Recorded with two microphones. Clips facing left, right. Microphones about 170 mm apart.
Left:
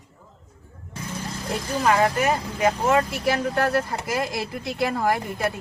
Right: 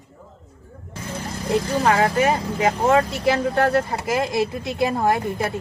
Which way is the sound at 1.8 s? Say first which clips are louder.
Even; 30° right (ahead or behind).